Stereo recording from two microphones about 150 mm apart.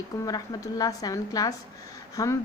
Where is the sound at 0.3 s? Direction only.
25° left (ahead or behind).